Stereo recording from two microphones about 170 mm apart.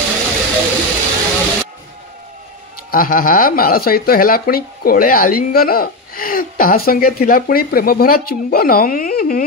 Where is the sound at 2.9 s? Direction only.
55° left (ahead or behind).